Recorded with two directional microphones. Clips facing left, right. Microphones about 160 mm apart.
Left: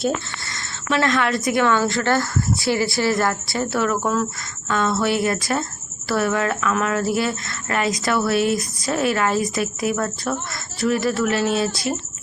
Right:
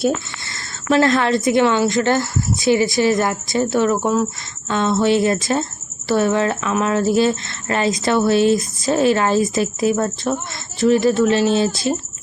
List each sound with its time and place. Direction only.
0.5 s speech: 35° right (ahead or behind)